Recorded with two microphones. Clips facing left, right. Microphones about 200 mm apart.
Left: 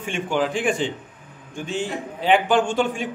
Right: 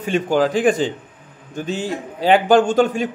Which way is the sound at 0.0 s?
40° right (ahead or behind).